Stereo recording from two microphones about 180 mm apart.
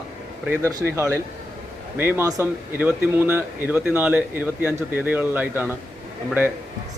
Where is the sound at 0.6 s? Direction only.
15° right (ahead or behind).